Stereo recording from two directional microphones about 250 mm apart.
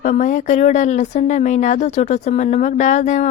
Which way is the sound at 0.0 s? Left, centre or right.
Left.